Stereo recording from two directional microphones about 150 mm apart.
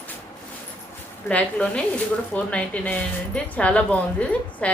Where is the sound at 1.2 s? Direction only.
5° left (ahead or behind).